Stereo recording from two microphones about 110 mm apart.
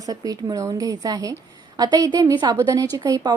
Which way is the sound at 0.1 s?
35° right (ahead or behind).